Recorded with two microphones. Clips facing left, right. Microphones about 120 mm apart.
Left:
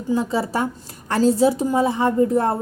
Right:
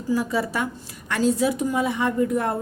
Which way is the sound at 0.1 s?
25° left (ahead or behind).